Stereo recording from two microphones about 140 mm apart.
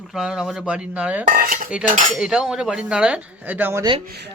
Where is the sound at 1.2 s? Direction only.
85° right.